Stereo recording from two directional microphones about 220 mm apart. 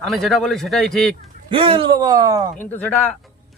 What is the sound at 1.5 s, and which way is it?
Speech, 25° right (ahead or behind).